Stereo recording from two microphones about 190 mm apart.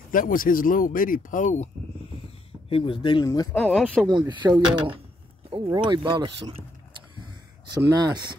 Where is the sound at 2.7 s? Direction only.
25° left (ahead or behind).